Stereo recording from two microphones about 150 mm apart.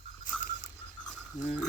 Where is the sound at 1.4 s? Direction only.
55° left (ahead or behind).